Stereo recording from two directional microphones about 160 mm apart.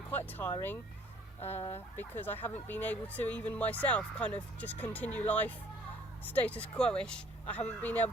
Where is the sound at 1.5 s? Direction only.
40° left (ahead or behind).